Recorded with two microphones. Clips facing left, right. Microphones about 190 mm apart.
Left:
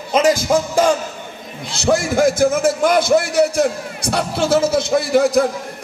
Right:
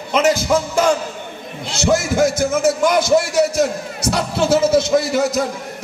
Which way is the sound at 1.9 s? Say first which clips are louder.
Left 1 dB; 55° left (ahead or behind).